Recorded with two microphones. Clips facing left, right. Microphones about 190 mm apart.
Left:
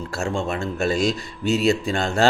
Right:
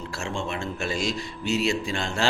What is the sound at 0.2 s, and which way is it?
Speech, 40° left (ahead or behind).